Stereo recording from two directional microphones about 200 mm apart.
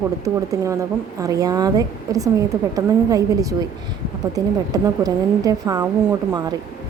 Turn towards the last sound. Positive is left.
turn(degrees=-20)  # may be behind; listen again after turning